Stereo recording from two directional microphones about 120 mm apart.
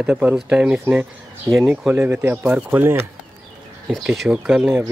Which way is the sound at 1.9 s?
15° right (ahead or behind).